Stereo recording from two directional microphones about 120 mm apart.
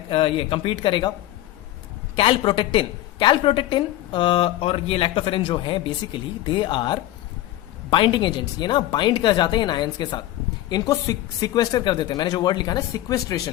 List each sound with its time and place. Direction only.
0.1 s a woman's voice: 50° left (ahead or behind)
2.1 s a woman's voice: 45° left (ahead or behind); by 13.4 s 30° left (ahead or behind)